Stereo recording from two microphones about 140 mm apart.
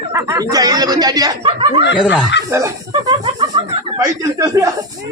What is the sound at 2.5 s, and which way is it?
Speech, 20° right (ahead or behind).